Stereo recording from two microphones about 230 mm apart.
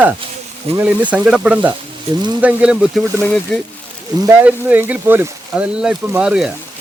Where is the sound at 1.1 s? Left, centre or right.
Centre.